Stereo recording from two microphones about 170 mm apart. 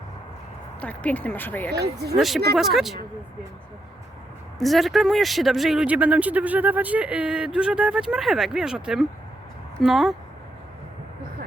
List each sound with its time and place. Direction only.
0.8 s speech: 10° left (ahead or behind)
1.7 s speech: 70° right (ahead or behind)
2.1 s speech: centre (ahead or behind)
4.6 s speech: centre (ahead or behind)